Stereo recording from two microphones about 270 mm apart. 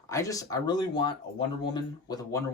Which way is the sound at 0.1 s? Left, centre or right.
Centre.